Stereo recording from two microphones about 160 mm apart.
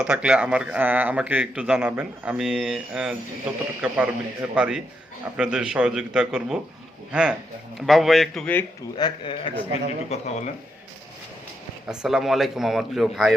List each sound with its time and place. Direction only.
0.0 s a man's voice: 5° right (ahead or behind)
9.0 s speech: 30° left (ahead or behind)
10.1 s speech: 45° left (ahead or behind)
11.9 s speech: centre (ahead or behind)